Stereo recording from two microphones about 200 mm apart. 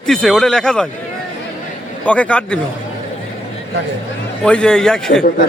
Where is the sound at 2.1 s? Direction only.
5° left (ahead or behind).